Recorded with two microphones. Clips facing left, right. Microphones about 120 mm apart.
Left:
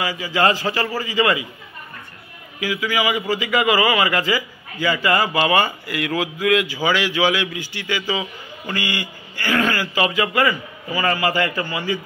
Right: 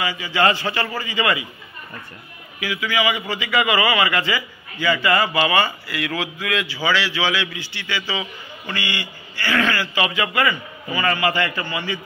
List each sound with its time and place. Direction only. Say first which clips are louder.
0.0 s a man's voice: left 1 dB; 40° left (ahead or behind)
2.6 s a man's voice: left 1 dB; 40° left (ahead or behind)